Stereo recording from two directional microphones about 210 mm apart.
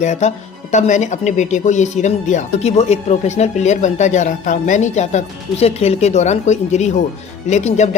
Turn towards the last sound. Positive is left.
turn(degrees=35)  # may be behind; listen again after turning